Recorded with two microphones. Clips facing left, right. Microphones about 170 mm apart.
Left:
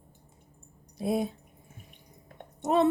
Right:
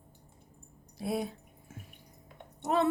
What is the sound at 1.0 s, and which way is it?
Speech, 20° left (ahead or behind).